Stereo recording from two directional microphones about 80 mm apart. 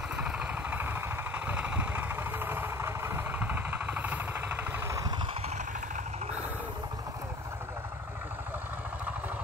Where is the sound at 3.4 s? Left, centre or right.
Right.